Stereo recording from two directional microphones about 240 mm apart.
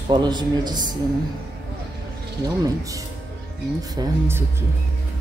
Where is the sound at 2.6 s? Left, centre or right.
Centre.